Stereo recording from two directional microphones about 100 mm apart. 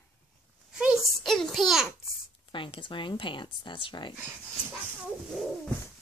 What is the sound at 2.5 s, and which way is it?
Speech, 60° left (ahead or behind).